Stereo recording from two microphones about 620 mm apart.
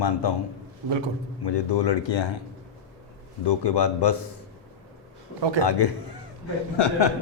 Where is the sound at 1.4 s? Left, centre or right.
Left.